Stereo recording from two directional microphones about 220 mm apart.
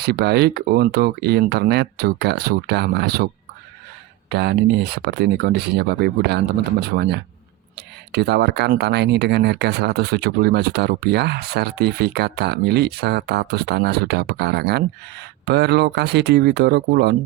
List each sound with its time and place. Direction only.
0.0 s speech: 45° right (ahead or behind)
4.3 s speech: 50° right (ahead or behind)